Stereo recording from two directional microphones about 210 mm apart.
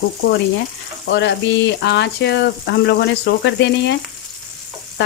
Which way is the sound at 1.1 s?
55° left (ahead or behind).